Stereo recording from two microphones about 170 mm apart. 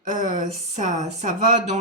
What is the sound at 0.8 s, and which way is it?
Speech, 45° right (ahead or behind).